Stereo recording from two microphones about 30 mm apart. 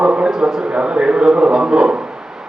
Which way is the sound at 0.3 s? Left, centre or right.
Centre.